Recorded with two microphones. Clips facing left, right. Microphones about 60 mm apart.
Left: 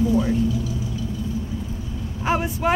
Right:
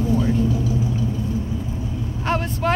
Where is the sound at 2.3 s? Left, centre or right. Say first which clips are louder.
Left 1 dB; centre.